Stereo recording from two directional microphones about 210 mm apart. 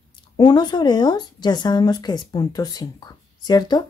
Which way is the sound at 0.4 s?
20° left (ahead or behind).